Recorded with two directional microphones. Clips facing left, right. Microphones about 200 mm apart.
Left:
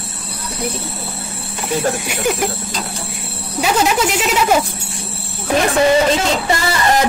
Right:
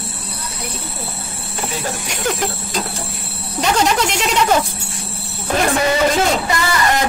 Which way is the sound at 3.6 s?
5° left (ahead or behind).